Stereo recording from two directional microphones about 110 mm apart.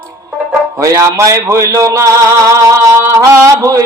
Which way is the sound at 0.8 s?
30° right (ahead or behind).